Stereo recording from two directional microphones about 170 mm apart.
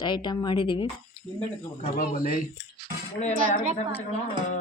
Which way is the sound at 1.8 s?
60° left (ahead or behind).